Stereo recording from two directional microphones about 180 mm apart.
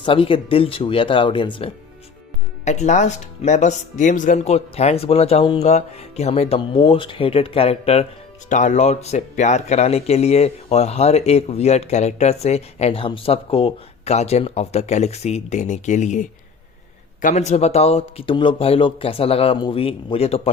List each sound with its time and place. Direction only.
0.0 s speech: 30° left (ahead or behind)
2.6 s speech: 40° left (ahead or behind)